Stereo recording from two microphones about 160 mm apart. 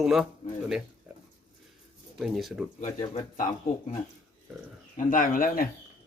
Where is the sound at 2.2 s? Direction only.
Centre (ahead or behind).